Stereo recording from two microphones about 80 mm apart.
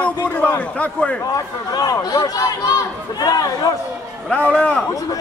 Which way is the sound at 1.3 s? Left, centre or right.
Left.